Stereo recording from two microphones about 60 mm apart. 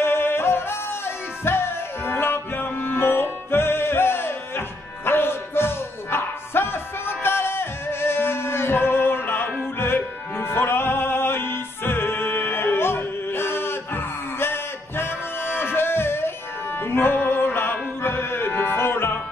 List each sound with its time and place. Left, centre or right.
0.0 s music: left